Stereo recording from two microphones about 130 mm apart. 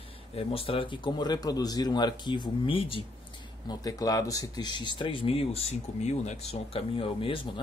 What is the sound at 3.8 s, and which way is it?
Speech, 25° left (ahead or behind).